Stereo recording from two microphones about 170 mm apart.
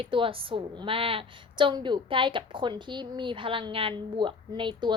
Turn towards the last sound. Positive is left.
turn(degrees=-30)  # may be behind; listen again after turning